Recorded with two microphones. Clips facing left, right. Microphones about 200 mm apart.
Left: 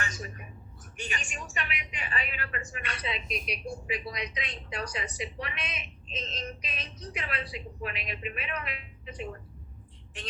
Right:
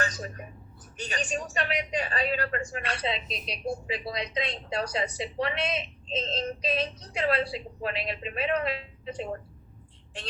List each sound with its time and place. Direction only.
0.0 s a woman's voice: 35° right (ahead or behind)